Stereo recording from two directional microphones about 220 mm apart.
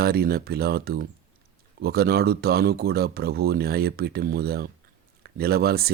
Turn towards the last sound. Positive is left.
turn(degrees=-45)  # may be behind; listen again after turning